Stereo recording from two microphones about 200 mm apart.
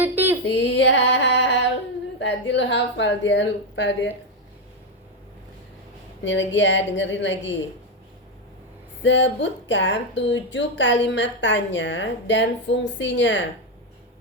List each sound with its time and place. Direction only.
0.0 s a sound: 10° right (ahead or behind)
0.4 s female singing: 60° left (ahead or behind)
2.1 s speech: 60° left (ahead or behind)
6.2 s speech: 65° left (ahead or behind)
9.0 s speech: 65° left (ahead or behind)